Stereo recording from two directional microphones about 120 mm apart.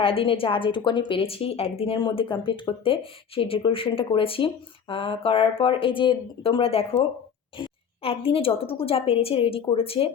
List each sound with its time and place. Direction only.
0.0 s a woman's voice: 50° left (ahead or behind)